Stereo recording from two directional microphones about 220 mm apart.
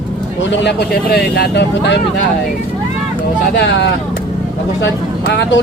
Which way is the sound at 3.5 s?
50° left (ahead or behind).